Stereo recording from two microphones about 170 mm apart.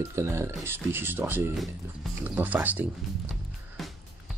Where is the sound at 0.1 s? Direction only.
15° right (ahead or behind).